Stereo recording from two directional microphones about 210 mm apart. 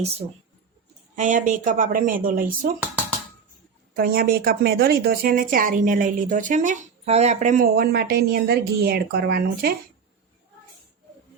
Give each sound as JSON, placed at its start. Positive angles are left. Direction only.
{"t": 1.1, "sound": "speech", "side_deg": -40}
{"t": 3.9, "sound": "a woman's voice", "side_deg": -45}